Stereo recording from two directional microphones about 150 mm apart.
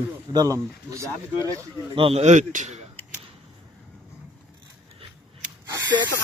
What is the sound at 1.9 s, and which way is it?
Speech, 40° right (ahead or behind).